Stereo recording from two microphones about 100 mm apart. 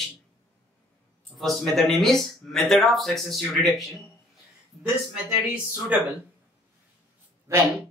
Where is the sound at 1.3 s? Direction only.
Centre (ahead or behind).